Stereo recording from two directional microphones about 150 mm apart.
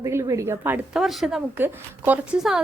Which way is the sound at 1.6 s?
10° right (ahead or behind).